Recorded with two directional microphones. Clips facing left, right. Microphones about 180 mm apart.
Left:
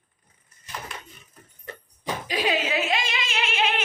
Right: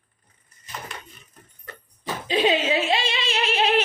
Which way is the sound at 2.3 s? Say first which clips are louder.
Right 5 dB; 25° right (ahead or behind).